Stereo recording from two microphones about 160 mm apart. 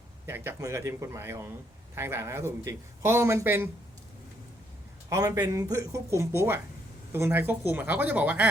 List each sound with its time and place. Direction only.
0.3 s a man's voice: 15° right (ahead or behind)
5.0 s a man's voice: 20° right (ahead or behind)